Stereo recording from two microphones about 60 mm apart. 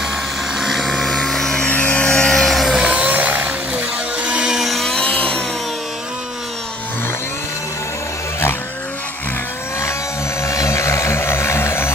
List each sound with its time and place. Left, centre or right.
0.6 s vehicle: centre
1.7 s a sound: left; by 2.7 s centre
2.7 s music: centre
4.6 s a sound: centre
5.1 s sawing: left
10.4 s helicopter: left